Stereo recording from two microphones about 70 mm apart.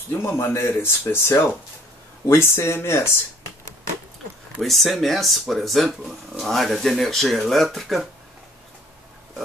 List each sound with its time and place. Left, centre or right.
0.1 s speech: left
4.6 s speech: centre